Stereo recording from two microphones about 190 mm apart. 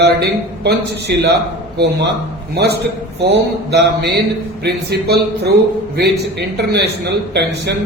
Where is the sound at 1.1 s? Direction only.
55° right (ahead or behind).